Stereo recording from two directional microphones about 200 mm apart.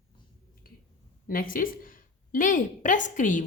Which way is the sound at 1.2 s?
45° left (ahead or behind).